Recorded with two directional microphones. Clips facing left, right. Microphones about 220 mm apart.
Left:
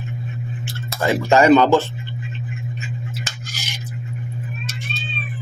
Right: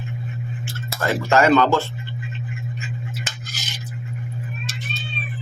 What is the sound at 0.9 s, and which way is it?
Speech, 15° left (ahead or behind).